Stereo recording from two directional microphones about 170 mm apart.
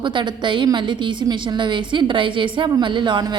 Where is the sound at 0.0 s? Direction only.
30° right (ahead or behind).